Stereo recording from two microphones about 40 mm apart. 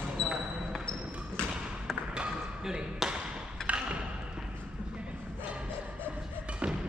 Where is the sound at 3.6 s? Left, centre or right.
Right.